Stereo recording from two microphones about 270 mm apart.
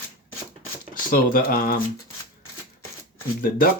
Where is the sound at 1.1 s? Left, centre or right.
Left.